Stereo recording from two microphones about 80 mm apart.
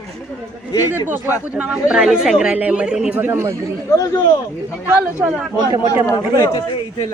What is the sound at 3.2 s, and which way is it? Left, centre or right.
Speech, right.